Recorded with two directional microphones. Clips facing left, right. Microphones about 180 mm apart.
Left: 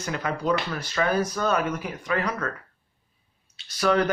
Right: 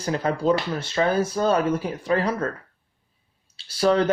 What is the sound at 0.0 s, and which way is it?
Speech, 30° right (ahead or behind).